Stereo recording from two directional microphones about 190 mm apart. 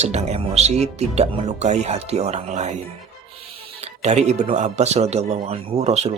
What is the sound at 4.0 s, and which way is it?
Speech, 35° right (ahead or behind).